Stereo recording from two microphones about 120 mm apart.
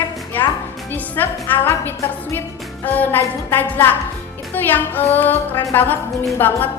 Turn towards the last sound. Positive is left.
turn(degrees=15)  # may be behind; listen again after turning